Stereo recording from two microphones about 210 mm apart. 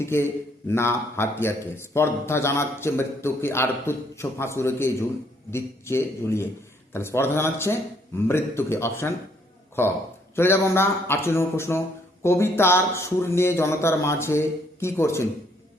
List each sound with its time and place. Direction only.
0.0 s a man's voice: 10° left (ahead or behind)